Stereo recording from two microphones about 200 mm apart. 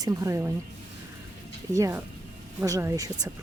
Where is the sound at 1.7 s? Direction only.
15° right (ahead or behind).